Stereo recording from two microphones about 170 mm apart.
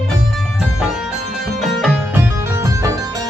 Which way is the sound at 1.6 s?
5° right (ahead or behind).